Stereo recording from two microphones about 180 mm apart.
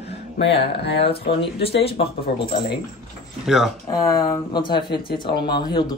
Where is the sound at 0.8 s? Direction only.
65° left (ahead or behind).